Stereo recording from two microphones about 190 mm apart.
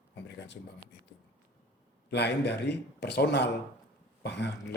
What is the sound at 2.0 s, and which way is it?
Speech, 60° left (ahead or behind).